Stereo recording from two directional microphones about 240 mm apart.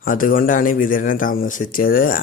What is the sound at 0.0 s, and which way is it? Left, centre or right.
Speech, left.